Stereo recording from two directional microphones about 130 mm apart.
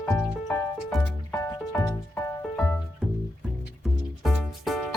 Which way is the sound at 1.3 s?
25° left (ahead or behind).